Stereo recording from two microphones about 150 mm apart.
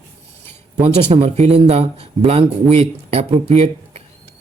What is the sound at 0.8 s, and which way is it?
Speech, 45° right (ahead or behind).